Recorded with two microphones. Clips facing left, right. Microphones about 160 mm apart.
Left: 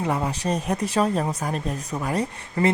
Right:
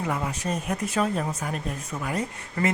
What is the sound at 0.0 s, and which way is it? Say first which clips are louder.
Speech: left 4 dB; 30° left (ahead or behind).